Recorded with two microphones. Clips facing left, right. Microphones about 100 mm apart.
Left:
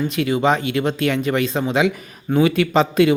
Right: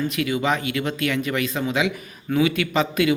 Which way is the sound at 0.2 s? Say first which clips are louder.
Left 6 dB; 30° left (ahead or behind).